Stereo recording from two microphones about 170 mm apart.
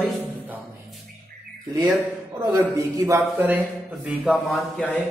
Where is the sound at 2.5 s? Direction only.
20° right (ahead or behind).